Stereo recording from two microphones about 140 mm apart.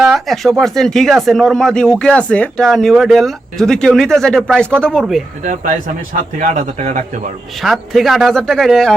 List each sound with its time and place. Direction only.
0.0 s speech: centre (ahead or behind)
5.4 s a man's voice: 65° right (ahead or behind)
7.5 s speech: centre (ahead or behind)